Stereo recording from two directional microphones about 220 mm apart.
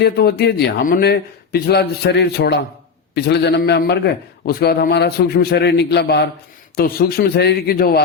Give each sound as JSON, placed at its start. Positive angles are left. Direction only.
{"t": 0.0, "sound": "a man's voice", "side_deg": 45}